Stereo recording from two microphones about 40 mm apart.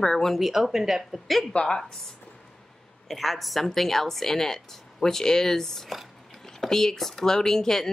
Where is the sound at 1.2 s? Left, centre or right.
Centre.